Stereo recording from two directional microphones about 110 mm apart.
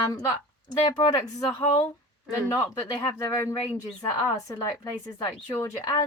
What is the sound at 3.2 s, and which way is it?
A woman's voice, 35° left (ahead or behind).